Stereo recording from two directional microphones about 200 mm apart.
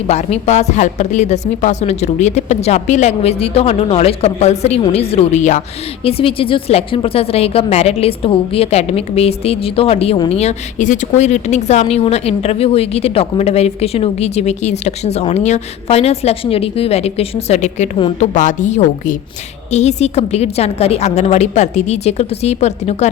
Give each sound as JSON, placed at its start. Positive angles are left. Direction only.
{"t": 0.1, "sound": "a woman's voice", "side_deg": 35}